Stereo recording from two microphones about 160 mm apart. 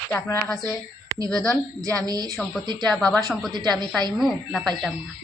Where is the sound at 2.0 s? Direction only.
25° right (ahead or behind).